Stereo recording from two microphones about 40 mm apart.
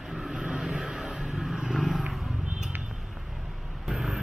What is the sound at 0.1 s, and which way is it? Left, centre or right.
Vehicle, centre.